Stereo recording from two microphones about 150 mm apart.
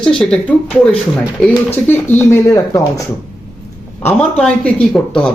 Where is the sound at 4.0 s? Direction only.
10° left (ahead or behind).